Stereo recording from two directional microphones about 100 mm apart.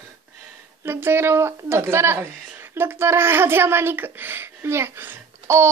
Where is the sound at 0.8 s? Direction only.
25° right (ahead or behind).